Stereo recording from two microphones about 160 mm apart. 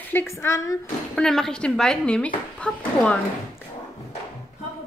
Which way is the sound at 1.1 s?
5° left (ahead or behind).